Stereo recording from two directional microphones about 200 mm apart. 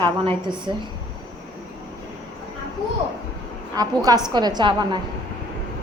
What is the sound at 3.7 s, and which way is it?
A woman's voice, 20° right (ahead or behind).